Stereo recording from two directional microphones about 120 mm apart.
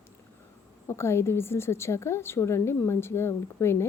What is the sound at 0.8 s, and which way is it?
A woman's voice, 20° left (ahead or behind).